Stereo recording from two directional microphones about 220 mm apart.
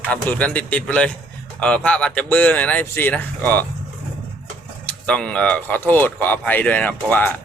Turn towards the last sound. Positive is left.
turn(degrees=5)  # may be behind; listen again after turning